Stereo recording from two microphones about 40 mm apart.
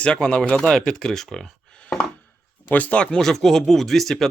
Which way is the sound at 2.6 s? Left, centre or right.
Left.